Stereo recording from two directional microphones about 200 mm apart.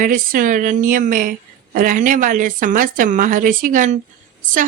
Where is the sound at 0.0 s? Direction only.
45° right (ahead or behind).